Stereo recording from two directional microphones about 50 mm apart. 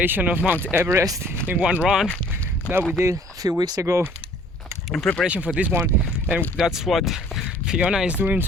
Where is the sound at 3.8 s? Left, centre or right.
Right.